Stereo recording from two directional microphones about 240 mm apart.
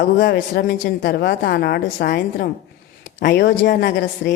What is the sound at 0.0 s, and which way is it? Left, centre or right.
A woman's voice, left.